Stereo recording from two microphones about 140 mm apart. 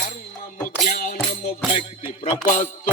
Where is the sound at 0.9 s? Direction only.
90° left.